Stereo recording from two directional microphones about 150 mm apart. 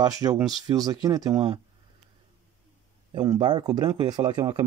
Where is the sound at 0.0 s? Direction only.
25° right (ahead or behind).